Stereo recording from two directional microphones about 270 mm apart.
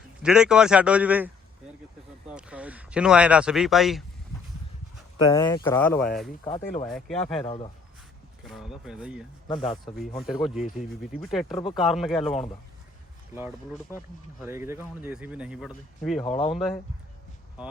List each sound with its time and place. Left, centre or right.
0.2 s speech: centre
2.3 s speech: centre
5.2 s speech: centre
7.4 s speech: left
8.4 s speech: centre
11.5 s speech: left
11.8 s speech: centre
14.4 s speech: centre
16.2 s speech: centre
16.5 s speech: centre